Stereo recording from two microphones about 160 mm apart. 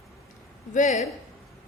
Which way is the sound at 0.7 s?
50° left (ahead or behind).